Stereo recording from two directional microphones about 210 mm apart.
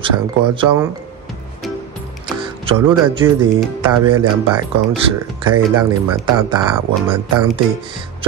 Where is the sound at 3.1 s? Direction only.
25° right (ahead or behind).